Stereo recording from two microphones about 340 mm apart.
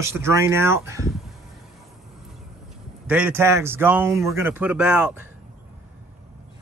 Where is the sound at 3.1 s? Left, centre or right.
Centre.